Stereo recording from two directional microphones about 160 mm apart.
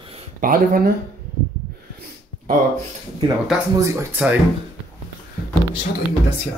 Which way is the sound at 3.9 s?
15° right (ahead or behind).